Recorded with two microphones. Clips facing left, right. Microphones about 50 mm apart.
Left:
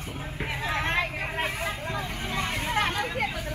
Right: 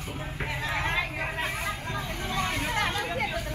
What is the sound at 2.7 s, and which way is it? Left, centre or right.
Chatter, centre.